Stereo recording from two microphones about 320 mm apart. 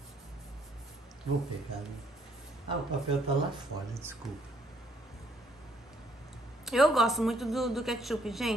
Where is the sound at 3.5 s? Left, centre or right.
Centre.